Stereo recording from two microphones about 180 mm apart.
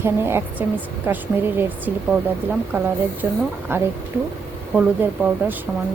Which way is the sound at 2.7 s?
10° right (ahead or behind).